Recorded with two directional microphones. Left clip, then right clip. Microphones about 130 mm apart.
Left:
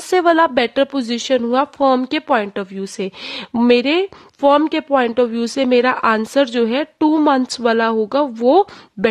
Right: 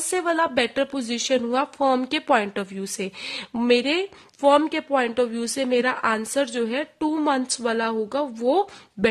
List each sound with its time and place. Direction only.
0.1 s a woman's voice: 45° left (ahead or behind)